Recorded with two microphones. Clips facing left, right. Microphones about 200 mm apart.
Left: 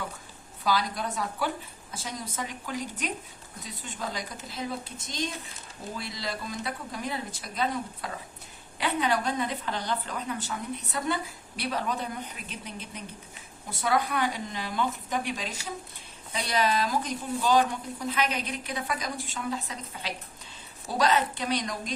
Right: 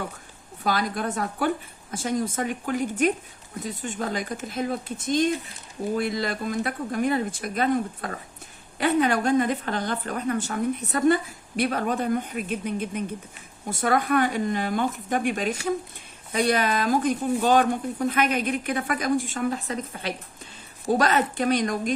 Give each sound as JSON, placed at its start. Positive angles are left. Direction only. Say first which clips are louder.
{"t": 0.6, "sound": "a woman's voice", "louder": "right 3 dB", "side_deg": -50}